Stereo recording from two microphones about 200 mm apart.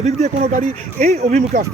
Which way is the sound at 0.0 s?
35° right (ahead or behind).